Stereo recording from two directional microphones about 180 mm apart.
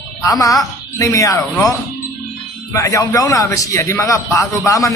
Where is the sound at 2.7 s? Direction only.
15° left (ahead or behind).